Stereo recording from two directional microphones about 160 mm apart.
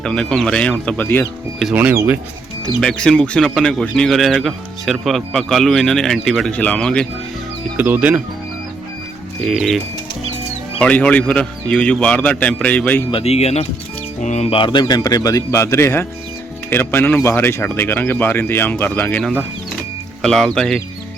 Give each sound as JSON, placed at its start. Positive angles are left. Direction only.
{"t": 0.0, "sound": "a man's voice", "side_deg": 5}
{"t": 1.7, "sound": "speech", "side_deg": -10}
{"t": 2.8, "sound": "a man's voice", "side_deg": 5}
{"t": 7.8, "sound": "speech", "side_deg": -10}
{"t": 9.4, "sound": "a man's voice", "side_deg": -5}
{"t": 13.1, "sound": "a man's voice", "side_deg": 35}